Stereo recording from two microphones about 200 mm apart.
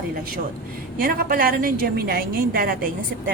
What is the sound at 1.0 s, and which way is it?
A woman's voice, 45° right (ahead or behind).